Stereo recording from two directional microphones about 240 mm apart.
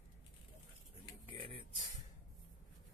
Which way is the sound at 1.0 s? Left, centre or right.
Left.